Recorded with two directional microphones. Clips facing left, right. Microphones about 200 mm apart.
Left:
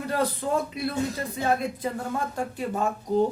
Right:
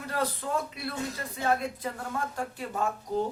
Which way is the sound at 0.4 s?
25° left (ahead or behind).